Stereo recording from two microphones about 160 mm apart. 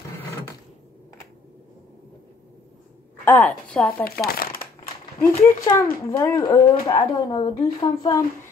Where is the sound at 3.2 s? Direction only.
10° left (ahead or behind).